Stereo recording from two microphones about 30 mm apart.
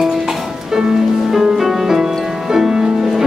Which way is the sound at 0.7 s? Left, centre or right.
Centre.